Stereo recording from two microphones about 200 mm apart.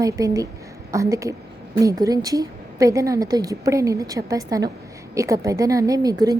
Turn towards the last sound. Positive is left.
turn(degrees=-20)  # may be behind; listen again after turning